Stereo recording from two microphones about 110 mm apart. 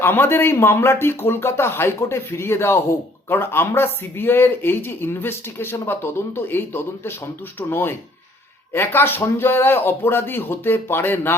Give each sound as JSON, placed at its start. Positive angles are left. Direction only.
{"t": 0.0, "sound": "speech", "side_deg": 20}